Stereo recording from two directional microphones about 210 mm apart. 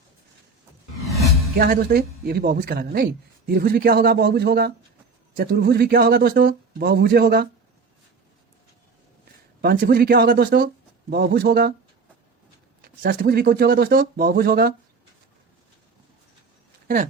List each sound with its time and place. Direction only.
1.0 s music: centre (ahead or behind)
1.5 s a woman's voice: 45° right (ahead or behind)
9.6 s a woman's voice: 45° right (ahead or behind)
12.8 s a woman's voice: 45° right (ahead or behind)